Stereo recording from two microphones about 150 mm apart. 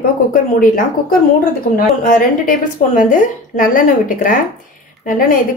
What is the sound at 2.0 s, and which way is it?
A woman's voice, 65° left (ahead or behind).